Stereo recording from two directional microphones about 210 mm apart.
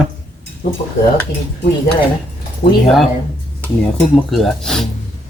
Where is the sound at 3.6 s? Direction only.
Centre (ahead or behind).